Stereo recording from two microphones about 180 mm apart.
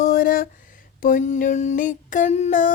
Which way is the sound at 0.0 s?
50° left (ahead or behind).